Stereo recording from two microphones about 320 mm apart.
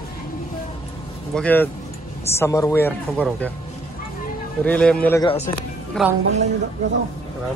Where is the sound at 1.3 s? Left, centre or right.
Centre.